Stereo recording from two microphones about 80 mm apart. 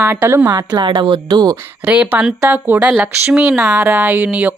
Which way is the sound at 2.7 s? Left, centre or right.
Right.